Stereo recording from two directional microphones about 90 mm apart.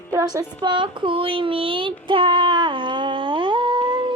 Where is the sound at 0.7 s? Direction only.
70° right (ahead or behind).